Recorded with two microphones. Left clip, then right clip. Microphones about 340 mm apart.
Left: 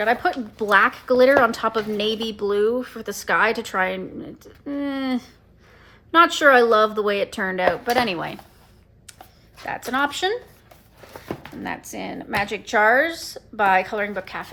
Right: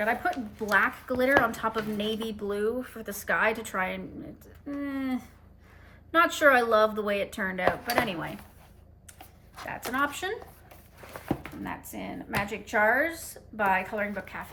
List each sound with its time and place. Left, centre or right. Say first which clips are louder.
0.0 s speech: left 7 dB; centre
9.6 s speech: left 6 dB; centre
11.6 s speech: left 7 dB; centre